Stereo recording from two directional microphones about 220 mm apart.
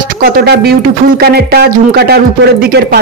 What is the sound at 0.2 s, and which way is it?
Speech, 45° right (ahead or behind).